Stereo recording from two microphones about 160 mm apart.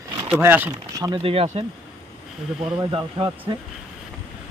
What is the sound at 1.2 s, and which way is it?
Speech, 35° right (ahead or behind).